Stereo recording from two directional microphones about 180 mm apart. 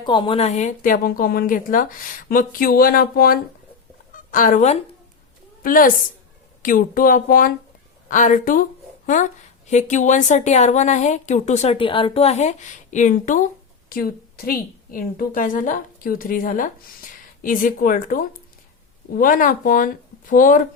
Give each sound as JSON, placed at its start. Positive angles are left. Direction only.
{"t": 0.0, "sound": "a woman's voice", "side_deg": 25}
{"t": 4.1, "sound": "a sound", "side_deg": 50}
{"t": 5.6, "sound": "a woman's voice", "side_deg": 50}
{"t": 9.6, "sound": "a woman's voice", "side_deg": 40}
{"t": 13.9, "sound": "a woman's voice", "side_deg": 55}